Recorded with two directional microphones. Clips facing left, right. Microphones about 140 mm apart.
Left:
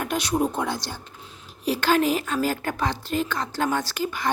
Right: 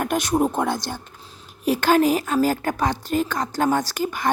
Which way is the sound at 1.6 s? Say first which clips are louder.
Right 4 dB; 45° right (ahead or behind).